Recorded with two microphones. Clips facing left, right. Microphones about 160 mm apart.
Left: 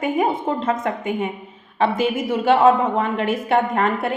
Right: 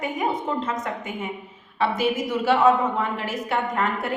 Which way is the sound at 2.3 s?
55° left (ahead or behind).